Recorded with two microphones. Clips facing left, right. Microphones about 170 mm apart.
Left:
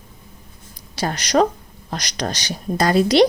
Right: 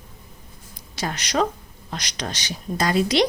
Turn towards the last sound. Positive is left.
turn(degrees=35)  # may be behind; listen again after turning